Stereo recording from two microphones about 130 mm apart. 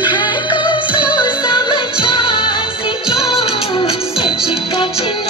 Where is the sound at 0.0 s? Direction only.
35° left (ahead or behind).